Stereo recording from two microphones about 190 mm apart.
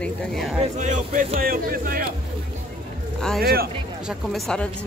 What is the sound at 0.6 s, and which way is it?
Speech, 40° right (ahead or behind).